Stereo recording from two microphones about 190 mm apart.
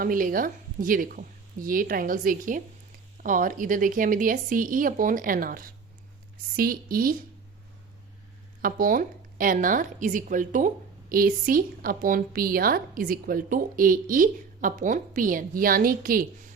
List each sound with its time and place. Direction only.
0.0 s a woman's voice: 45° right (ahead or behind)
8.6 s a woman's voice: 50° right (ahead or behind)